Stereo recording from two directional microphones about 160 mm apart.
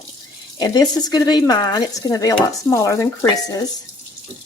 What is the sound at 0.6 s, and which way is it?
Speech, 25° left (ahead or behind).